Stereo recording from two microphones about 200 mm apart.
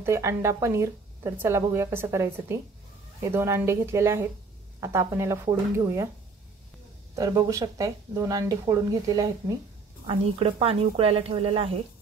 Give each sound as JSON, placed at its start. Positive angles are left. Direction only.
{"t": 0.0, "sound": "speech", "side_deg": -15}
{"t": 7.2, "sound": "speech", "side_deg": -15}
{"t": 10.0, "sound": "speech", "side_deg": -30}